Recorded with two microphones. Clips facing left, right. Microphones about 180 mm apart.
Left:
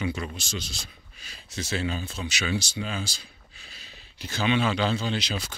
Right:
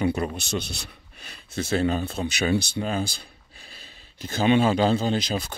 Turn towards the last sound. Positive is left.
turn(degrees=-50)  # may be behind; listen again after turning